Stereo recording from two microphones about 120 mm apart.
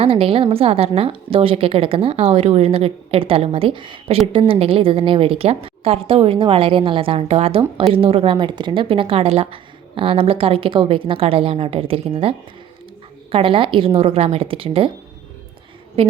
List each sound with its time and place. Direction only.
0.0 s a woman's voice: 50° right (ahead or behind)
13.3 s a woman's voice: 50° right (ahead or behind)